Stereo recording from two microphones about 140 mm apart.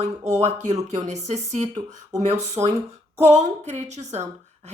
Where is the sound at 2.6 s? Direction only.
25° right (ahead or behind).